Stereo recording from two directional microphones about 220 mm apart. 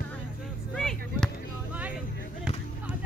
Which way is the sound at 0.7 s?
Centre (ahead or behind).